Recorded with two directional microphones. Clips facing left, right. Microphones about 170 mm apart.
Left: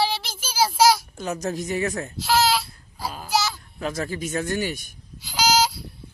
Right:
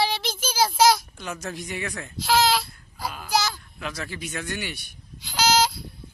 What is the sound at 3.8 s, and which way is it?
Speech, 45° left (ahead or behind).